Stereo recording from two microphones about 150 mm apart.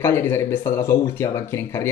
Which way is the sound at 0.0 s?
15° left (ahead or behind).